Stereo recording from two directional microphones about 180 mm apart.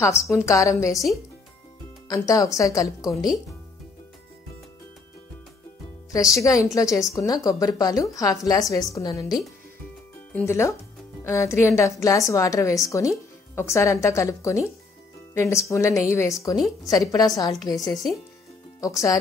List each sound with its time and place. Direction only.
0.0 s a woman's voice: 15° left (ahead or behind)
2.0 s a woman's voice: 20° left (ahead or behind)
6.1 s a woman's voice: 15° left (ahead or behind)
17.7 s speech: centre (ahead or behind)
18.8 s a woman's voice: 20° left (ahead or behind)